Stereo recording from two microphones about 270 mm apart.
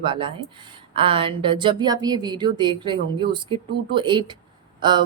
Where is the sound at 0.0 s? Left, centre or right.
Centre.